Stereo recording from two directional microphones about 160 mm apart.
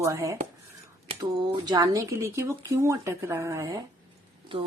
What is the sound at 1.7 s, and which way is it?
Speech, 25° right (ahead or behind).